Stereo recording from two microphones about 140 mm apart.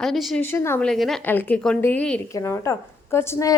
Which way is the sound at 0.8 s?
Centre (ahead or behind).